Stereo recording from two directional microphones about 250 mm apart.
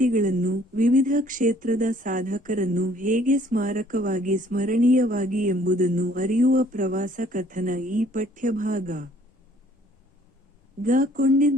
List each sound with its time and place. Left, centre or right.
0.0 s speech: right
10.8 s speech: right